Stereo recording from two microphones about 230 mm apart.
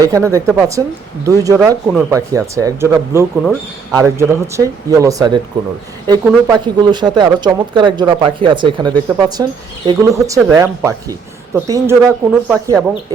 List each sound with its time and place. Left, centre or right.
0.0 s speech: centre